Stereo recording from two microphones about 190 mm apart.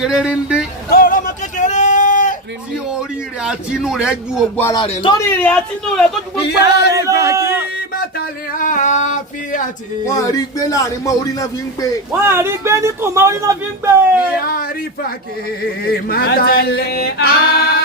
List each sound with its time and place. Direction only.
0.0 s speech: 5° right (ahead or behind)
0.9 s a sound: 50° left (ahead or behind)
3.4 s speech: 5° right (ahead or behind)
4.7 s a man's voice: 25° left (ahead or behind)
5.2 s speech: 5° left (ahead or behind)
6.4 s a sound: 60° left (ahead or behind)
6.9 s a man's voice: 15° right (ahead or behind)
8.2 s a sound: 45° left (ahead or behind)
10.2 s a man's voice: 15° left (ahead or behind)
12.2 s speech: 15° right (ahead or behind)
14.4 s a man's voice: 50° left (ahead or behind)
16.0 s a sound: 55° left (ahead or behind)